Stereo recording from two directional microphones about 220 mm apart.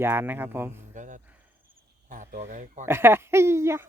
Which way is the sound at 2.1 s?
35° right (ahead or behind).